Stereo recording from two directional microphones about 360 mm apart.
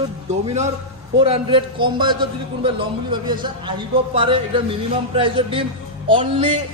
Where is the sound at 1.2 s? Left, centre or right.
Centre.